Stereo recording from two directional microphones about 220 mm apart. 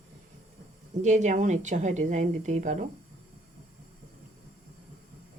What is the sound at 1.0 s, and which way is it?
A woman's voice, 35° right (ahead or behind).